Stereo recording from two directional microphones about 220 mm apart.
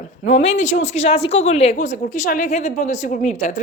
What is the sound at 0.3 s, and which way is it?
Speech, 35° left (ahead or behind).